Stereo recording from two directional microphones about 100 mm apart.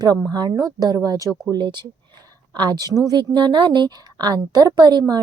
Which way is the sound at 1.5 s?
50° right (ahead or behind).